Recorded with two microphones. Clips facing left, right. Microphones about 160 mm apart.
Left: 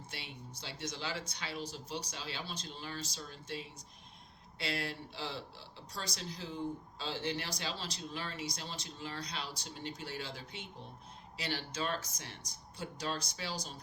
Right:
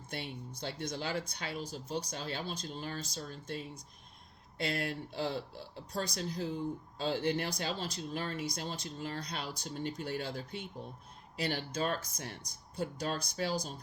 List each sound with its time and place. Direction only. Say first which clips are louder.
0.1 s speech: right 10 dB; 50° right (ahead or behind)